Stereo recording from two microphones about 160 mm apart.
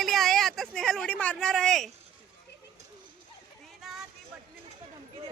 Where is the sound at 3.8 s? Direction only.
Centre (ahead or behind).